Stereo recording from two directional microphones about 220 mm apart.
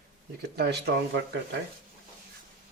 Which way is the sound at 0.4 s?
50° right (ahead or behind).